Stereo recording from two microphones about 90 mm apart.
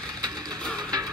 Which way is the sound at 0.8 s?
45° right (ahead or behind).